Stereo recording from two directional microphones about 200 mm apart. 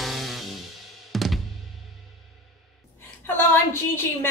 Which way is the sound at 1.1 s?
Centre (ahead or behind).